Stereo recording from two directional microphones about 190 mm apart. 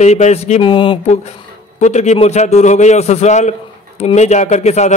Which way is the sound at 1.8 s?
35° left (ahead or behind).